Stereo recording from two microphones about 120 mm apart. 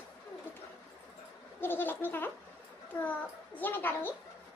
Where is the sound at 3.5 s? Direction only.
15° left (ahead or behind).